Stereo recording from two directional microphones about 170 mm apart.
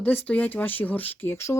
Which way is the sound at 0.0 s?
10° left (ahead or behind).